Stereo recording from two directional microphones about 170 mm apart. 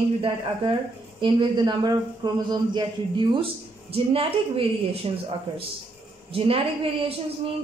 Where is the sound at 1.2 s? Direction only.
30° right (ahead or behind).